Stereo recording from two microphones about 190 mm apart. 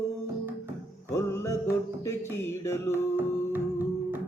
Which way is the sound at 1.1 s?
15° left (ahead or behind).